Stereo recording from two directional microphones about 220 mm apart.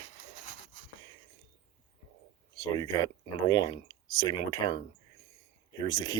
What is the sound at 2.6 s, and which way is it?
Speech, 15° left (ahead or behind).